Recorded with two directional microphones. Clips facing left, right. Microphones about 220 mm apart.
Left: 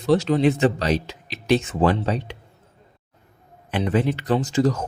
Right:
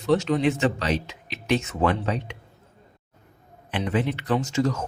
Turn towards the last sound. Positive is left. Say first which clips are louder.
# left 3 dB
turn(degrees=35)  # may be behind; listen again after turning